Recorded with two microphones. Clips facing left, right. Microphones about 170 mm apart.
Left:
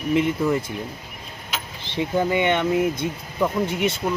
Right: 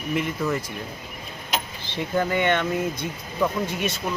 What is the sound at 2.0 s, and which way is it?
Speech, 15° left (ahead or behind).